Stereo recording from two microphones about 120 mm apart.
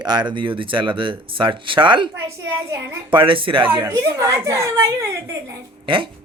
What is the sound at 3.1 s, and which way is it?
Speech, 45° right (ahead or behind).